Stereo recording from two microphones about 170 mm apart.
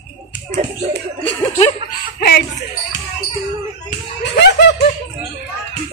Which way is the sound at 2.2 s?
75° left (ahead or behind).